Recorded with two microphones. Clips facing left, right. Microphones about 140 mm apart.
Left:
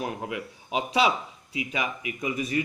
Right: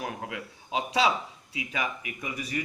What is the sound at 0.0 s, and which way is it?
Speech, 20° left (ahead or behind).